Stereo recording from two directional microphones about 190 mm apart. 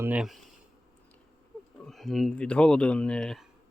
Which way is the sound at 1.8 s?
Centre (ahead or behind).